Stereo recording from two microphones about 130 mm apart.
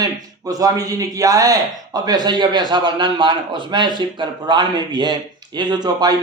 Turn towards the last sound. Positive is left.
turn(degrees=-30)  # may be behind; listen again after turning